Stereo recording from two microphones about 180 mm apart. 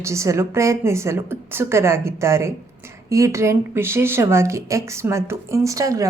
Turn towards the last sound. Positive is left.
turn(degrees=-20)  # may be behind; listen again after turning